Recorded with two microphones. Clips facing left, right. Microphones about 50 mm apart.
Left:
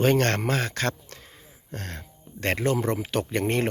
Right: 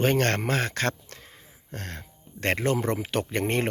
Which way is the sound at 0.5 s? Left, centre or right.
Right.